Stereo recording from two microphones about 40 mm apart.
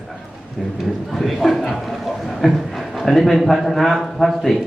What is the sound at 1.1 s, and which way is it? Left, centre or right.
A man's voice, centre.